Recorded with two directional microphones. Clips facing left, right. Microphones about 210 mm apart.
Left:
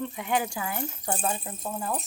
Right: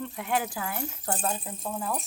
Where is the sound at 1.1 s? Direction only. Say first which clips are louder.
Left 1 dB; 5° left (ahead or behind).